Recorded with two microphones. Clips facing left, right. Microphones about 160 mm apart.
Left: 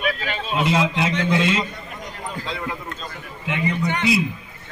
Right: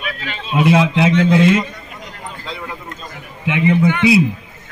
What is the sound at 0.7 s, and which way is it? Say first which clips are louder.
Speech: right 8 dB; 60° right (ahead or behind).